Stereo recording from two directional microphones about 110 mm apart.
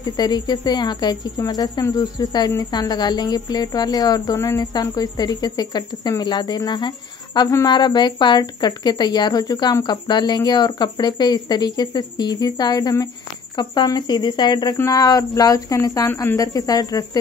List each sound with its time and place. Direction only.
0.0 s speech: 40° left (ahead or behind)